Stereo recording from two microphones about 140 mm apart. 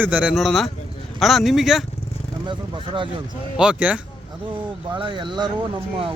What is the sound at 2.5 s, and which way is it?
Speech, 35° right (ahead or behind).